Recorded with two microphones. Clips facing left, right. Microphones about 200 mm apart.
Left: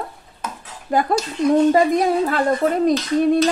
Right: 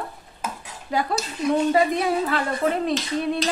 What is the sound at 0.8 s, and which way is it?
A woman's voice, 50° left (ahead or behind).